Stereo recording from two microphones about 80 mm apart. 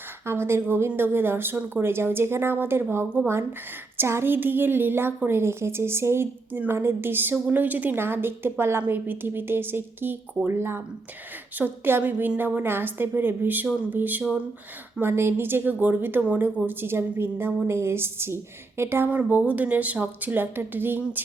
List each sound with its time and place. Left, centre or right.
0.3 s a woman's voice: right
16.6 s a woman's voice: right